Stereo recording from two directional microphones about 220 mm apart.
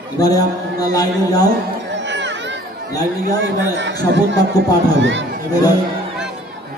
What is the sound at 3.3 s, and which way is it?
A man's voice, 55° right (ahead or behind).